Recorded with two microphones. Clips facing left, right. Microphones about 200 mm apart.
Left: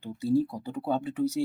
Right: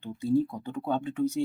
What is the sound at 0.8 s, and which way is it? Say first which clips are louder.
Speech: even; 5° left (ahead or behind).